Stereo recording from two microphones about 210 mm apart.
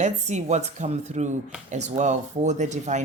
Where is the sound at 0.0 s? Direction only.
35° right (ahead or behind).